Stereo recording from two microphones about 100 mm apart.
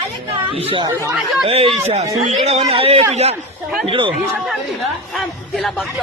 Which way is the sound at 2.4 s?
90° right.